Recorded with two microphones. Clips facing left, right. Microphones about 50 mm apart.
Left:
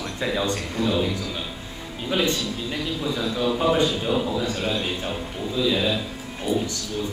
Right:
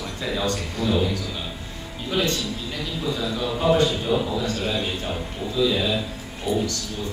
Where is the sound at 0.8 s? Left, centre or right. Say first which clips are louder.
Right 2 dB; centre.